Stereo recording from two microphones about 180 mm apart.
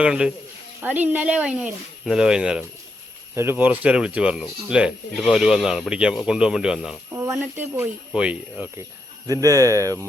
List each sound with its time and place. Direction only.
0.0 s speech: 5° right (ahead or behind)
7.1 s a sound: 15° right (ahead or behind)
7.5 s speech: 10° right (ahead or behind)
9.2 s speech: 20° right (ahead or behind)